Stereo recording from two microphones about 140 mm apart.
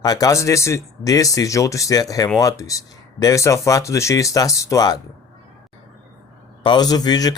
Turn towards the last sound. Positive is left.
turn(degrees=30)  # may be behind; listen again after turning